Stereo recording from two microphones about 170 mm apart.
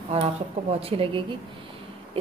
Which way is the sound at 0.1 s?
35° right (ahead or behind).